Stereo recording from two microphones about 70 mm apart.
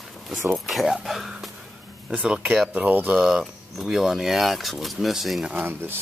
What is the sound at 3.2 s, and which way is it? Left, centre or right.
Speech, centre.